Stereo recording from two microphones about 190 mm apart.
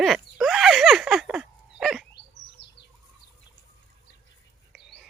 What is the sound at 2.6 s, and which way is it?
Bird vocalization, 65° left (ahead or behind).